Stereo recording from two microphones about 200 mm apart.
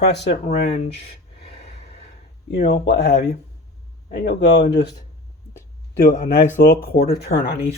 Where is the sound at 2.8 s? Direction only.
55° left (ahead or behind).